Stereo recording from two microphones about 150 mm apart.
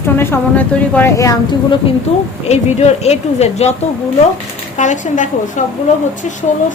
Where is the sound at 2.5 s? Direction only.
45° left (ahead or behind).